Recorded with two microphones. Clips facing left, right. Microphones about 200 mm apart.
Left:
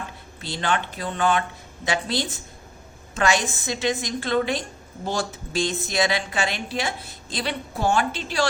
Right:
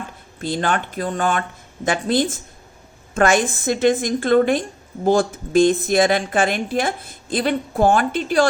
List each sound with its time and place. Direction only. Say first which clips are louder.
0.3 s a woman's voice: right 4 dB; 50° right (ahead or behind)